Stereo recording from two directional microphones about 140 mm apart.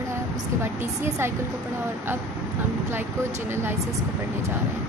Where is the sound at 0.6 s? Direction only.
20° right (ahead or behind).